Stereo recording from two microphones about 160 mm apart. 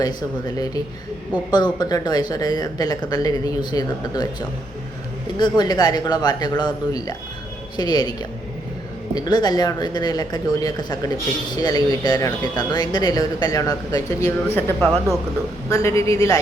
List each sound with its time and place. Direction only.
0.0 s speech: 25° left (ahead or behind)
9.1 s speech: 25° left (ahead or behind)
14.5 s speech: 10° left (ahead or behind)
15.7 s speech: 15° left (ahead or behind)